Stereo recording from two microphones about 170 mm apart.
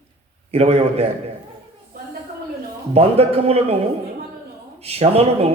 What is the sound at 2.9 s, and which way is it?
Speech, 35° right (ahead or behind).